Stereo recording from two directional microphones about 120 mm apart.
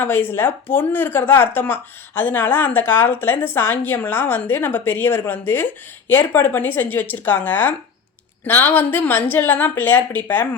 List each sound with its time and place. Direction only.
0.0 s speech: 15° left (ahead or behind)